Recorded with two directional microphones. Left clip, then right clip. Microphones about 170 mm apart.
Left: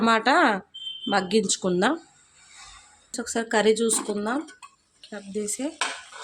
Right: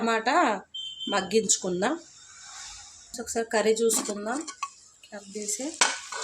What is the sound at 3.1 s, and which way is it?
Speech, 50° left (ahead or behind).